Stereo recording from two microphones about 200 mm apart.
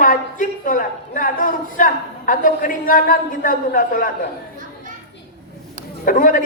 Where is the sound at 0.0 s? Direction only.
40° left (ahead or behind).